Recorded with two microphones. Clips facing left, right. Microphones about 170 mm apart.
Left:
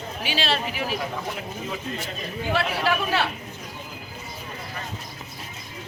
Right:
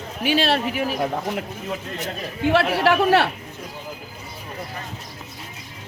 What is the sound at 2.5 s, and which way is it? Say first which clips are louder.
Speech: right 6 dB; 65° right (ahead or behind).